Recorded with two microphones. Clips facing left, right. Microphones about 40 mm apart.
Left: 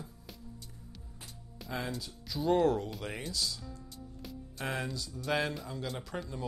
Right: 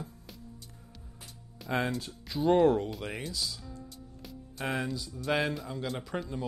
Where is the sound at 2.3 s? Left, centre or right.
Right.